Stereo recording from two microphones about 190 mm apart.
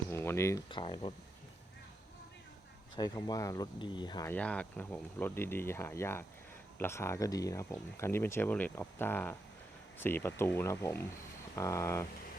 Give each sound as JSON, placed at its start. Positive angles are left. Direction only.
{"t": 0.1, "sound": "speech", "side_deg": 15}
{"t": 2.9, "sound": "speech", "side_deg": 20}
{"t": 4.3, "sound": "speech", "side_deg": 5}